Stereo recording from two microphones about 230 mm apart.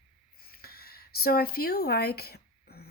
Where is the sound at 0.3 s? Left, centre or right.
Left.